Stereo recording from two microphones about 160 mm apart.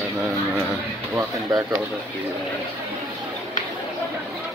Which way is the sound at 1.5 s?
25° right (ahead or behind).